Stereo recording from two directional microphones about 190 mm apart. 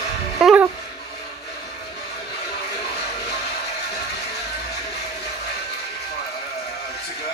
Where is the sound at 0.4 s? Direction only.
Centre (ahead or behind).